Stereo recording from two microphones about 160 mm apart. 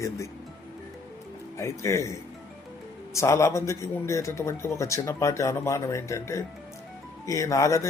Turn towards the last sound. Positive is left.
turn(degrees=20)  # may be behind; listen again after turning